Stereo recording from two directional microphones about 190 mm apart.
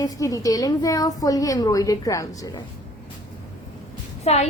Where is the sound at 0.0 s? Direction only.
20° left (ahead or behind).